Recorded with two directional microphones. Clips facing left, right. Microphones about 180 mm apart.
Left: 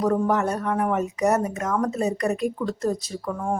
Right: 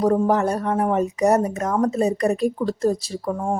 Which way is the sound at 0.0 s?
30° right (ahead or behind).